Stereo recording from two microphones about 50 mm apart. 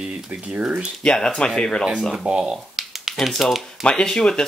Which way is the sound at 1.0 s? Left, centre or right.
Centre.